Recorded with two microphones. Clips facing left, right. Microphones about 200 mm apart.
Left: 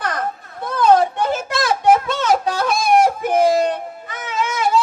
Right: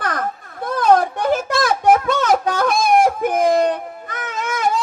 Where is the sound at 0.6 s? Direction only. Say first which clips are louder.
Left 1 dB; 50° right (ahead or behind).